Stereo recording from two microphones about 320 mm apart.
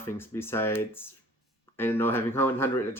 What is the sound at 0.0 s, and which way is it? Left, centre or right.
Speech, centre.